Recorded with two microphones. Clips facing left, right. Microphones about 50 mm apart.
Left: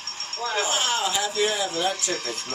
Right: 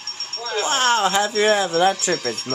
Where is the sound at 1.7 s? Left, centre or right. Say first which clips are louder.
Right 8 dB; right.